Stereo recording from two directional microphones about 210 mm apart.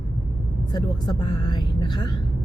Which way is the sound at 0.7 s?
20° left (ahead or behind).